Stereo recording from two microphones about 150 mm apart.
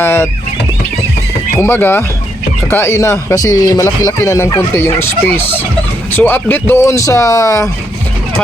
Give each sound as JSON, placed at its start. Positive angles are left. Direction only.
{"t": 0.0, "sound": "speech", "side_deg": 15}
{"t": 1.5, "sound": "speech", "side_deg": 15}